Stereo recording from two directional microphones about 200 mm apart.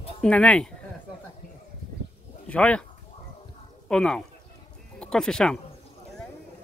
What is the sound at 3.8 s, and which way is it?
Speech, 5° left (ahead or behind).